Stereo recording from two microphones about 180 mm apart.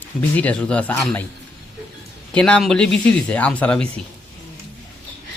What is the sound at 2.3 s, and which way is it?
Speech, 5° left (ahead or behind).